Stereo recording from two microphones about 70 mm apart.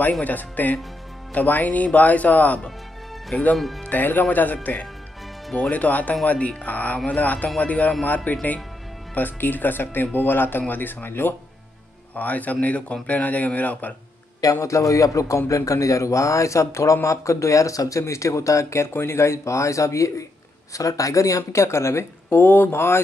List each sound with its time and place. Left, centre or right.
0.2 s a man's voice: left
3.5 s speech: centre
3.9 s a man's voice: left
14.4 s a man's voice: left